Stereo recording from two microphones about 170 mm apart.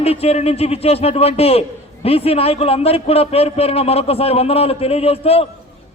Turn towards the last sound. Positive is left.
turn(degrees=35)  # may be behind; listen again after turning